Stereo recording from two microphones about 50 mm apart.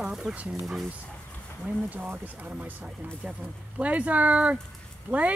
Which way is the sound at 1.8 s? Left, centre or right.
Right.